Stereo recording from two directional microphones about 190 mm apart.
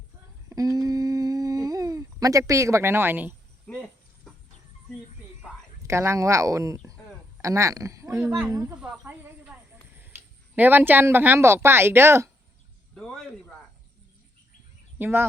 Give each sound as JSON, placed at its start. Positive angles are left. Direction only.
{"t": 0.5, "sound": "humming", "side_deg": -20}
{"t": 3.7, "sound": "cricket", "side_deg": 5}
{"t": 5.9, "sound": "speech", "side_deg": -15}
{"t": 8.7, "sound": "a sound", "side_deg": -5}
{"t": 10.5, "sound": "speech", "side_deg": -10}
{"t": 13.0, "sound": "speech", "side_deg": 0}
{"t": 14.9, "sound": "speech", "side_deg": -10}